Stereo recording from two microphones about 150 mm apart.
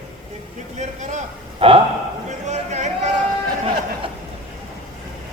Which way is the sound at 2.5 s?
50° right (ahead or behind).